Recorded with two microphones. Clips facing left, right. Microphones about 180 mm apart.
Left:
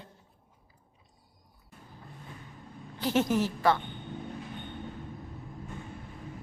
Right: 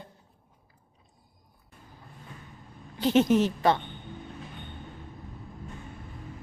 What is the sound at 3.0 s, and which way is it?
Speech, 20° right (ahead or behind).